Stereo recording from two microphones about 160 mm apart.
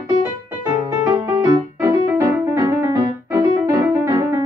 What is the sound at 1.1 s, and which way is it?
Music, 25° right (ahead or behind).